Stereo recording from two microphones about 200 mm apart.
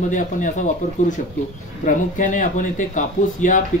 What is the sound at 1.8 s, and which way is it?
Speech, 40° left (ahead or behind).